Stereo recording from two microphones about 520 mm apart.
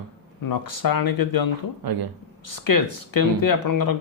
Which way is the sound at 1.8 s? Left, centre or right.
Right.